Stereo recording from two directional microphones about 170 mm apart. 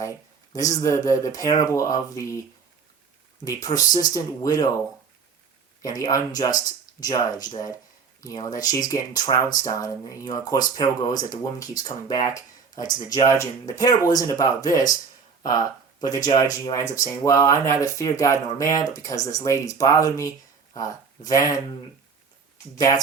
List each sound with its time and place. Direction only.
0.0 s speech: 20° left (ahead or behind)
3.4 s speech: 20° left (ahead or behind)
5.8 s speech: 20° left (ahead or behind)